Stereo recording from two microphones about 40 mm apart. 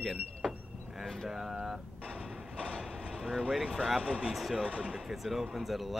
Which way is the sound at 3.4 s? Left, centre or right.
Centre.